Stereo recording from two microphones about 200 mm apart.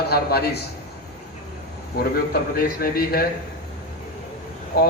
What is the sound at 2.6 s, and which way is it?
Speech, 50° left (ahead or behind).